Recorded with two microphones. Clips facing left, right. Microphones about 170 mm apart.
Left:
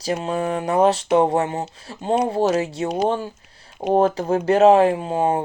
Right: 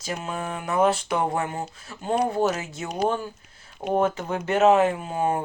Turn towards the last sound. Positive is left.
turn(degrees=30)  # may be behind; listen again after turning